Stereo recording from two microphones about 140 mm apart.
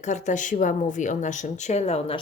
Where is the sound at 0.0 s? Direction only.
60° left (ahead or behind).